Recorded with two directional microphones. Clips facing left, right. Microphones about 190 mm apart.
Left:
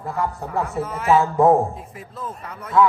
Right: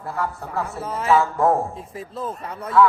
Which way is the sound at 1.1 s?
15° left (ahead or behind).